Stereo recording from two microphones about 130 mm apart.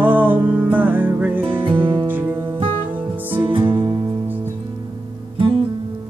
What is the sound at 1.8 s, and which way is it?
Music, 35° right (ahead or behind).